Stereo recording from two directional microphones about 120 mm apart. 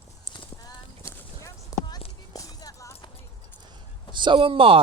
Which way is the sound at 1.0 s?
30° left (ahead or behind).